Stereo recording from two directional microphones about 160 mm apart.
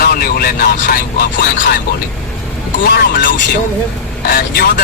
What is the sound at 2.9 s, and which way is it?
Speech, 60° left (ahead or behind).